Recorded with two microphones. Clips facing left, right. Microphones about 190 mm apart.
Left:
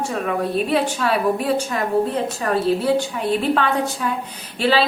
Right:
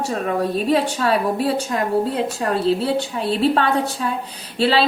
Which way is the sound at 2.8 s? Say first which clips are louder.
Left 2 dB; 30° right (ahead or behind).